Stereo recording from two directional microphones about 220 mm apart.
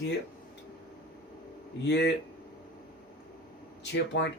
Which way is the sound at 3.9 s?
55° left (ahead or behind).